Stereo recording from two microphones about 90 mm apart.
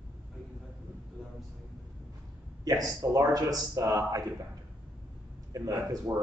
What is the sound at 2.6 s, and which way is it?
Speech, 45° right (ahead or behind).